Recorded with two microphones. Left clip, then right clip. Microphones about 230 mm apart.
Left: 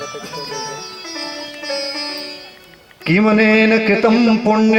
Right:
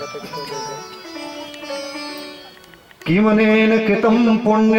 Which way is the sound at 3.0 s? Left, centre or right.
Centre.